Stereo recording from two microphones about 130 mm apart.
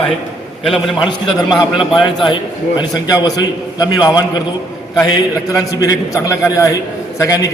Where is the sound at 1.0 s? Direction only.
35° left (ahead or behind).